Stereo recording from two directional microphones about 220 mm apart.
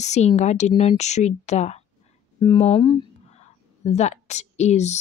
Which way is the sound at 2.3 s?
15° left (ahead or behind).